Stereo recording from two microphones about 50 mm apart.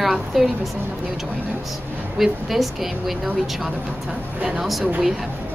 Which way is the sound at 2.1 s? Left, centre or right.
Centre.